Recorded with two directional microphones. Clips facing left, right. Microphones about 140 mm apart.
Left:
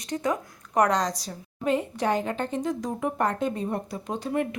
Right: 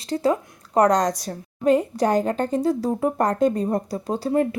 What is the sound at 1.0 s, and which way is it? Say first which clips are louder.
A woman's voice: right 6 dB; 50° right (ahead or behind).